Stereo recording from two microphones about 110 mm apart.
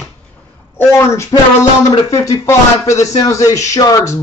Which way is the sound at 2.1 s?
30° left (ahead or behind).